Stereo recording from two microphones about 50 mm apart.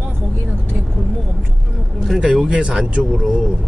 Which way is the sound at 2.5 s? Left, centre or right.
Centre.